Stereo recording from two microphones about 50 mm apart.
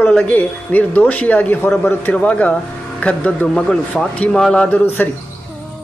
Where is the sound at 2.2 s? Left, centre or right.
Left.